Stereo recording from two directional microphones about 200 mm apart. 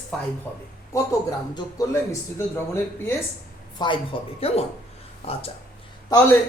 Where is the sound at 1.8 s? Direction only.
15° left (ahead or behind).